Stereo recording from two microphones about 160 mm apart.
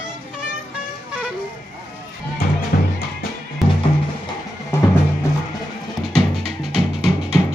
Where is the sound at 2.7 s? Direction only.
65° left (ahead or behind).